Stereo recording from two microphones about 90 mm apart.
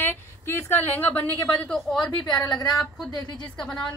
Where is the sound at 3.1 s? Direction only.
50° left (ahead or behind).